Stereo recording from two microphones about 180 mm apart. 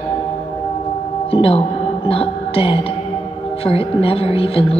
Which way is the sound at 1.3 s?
30° left (ahead or behind).